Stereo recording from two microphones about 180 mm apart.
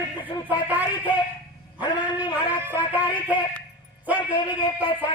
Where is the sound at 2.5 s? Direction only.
10° right (ahead or behind).